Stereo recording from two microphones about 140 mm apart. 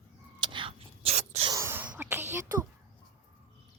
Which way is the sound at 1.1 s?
55° right (ahead or behind).